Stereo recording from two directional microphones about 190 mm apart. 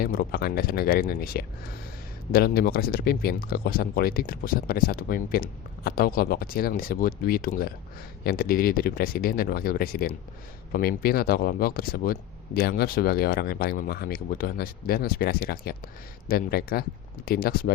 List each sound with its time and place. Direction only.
0.0 s speech: 50° left (ahead or behind)